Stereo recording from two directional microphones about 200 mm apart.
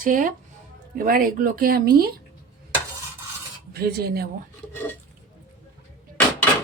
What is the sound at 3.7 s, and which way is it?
Speech, 50° right (ahead or behind).